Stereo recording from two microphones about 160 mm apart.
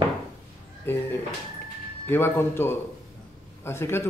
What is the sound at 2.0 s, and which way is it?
Speech, 15° left (ahead or behind).